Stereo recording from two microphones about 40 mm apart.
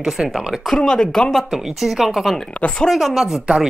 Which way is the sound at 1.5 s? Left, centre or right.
Centre.